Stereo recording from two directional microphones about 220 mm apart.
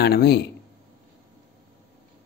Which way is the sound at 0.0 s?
45° left (ahead or behind).